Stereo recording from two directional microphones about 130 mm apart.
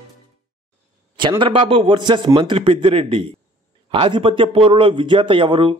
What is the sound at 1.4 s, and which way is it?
A man's voice, 45° right (ahead or behind).